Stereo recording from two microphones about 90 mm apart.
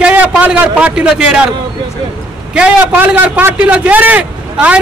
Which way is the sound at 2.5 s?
15° right (ahead or behind).